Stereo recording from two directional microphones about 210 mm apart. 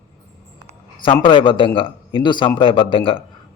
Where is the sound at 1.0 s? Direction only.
25° left (ahead or behind).